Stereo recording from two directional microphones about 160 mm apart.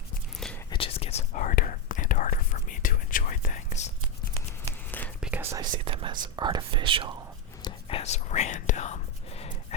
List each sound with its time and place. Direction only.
0.7 s whispering: 35° left (ahead or behind)
4.9 s whispering: 10° left (ahead or behind)
5.2 s whispering: 10° right (ahead or behind)
5.8 s speech: 35° right (ahead or behind)
7.6 s whispering: 35° left (ahead or behind)